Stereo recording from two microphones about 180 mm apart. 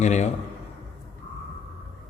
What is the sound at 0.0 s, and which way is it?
Speech, 40° left (ahead or behind).